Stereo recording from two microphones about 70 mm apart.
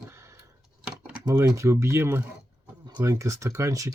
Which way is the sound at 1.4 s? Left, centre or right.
Right.